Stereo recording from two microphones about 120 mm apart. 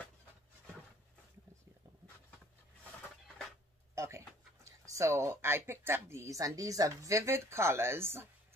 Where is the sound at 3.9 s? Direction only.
25° right (ahead or behind).